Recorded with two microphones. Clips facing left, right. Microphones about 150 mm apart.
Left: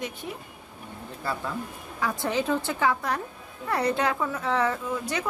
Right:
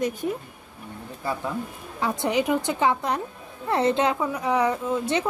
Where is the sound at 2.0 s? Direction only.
20° right (ahead or behind).